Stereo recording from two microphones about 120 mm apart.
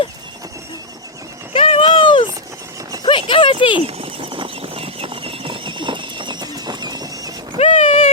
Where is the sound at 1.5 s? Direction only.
50° left (ahead or behind).